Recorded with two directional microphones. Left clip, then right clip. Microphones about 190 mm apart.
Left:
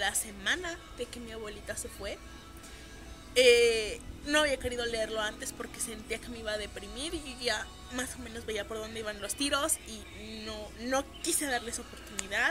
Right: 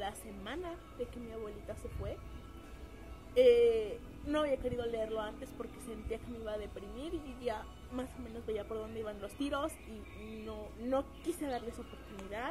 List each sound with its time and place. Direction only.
0.0 s speech: 15° left (ahead or behind)
3.3 s speech: 10° left (ahead or behind)